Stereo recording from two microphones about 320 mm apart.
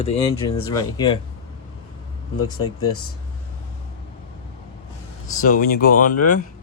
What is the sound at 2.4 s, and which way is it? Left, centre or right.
Speech, centre.